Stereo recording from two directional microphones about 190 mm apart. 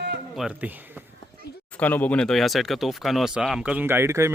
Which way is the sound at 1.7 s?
10° left (ahead or behind).